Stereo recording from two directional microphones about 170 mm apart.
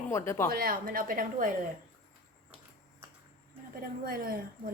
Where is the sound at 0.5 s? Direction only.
60° right (ahead or behind).